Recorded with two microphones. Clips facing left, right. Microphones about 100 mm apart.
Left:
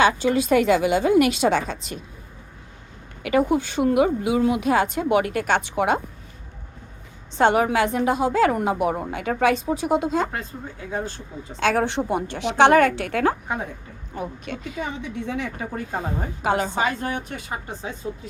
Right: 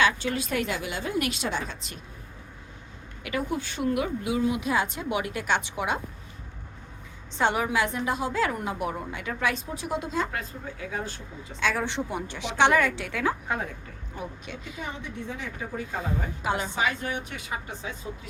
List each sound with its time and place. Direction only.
0.3 s a woman's voice: 90° left
3.2 s a woman's voice: 75° left (ahead or behind); by 6.0 s 55° left (ahead or behind)
7.3 s a woman's voice: 55° left (ahead or behind)
10.3 s speech: 30° left (ahead or behind)
11.6 s a woman's voice: 55° left (ahead or behind)
16.6 s speech: 40° left (ahead or behind)